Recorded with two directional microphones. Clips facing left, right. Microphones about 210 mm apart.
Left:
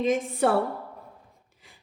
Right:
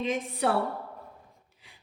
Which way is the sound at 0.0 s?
45° left (ahead or behind).